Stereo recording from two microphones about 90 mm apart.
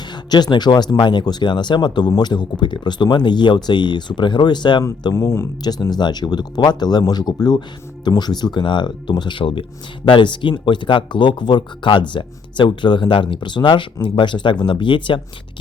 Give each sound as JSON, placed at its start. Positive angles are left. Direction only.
{"t": 0.1, "sound": "speech", "side_deg": 50}
{"t": 5.1, "sound": "speech", "side_deg": 30}
{"t": 5.9, "sound": "speech", "side_deg": 55}
{"t": 10.1, "sound": "speech", "side_deg": 60}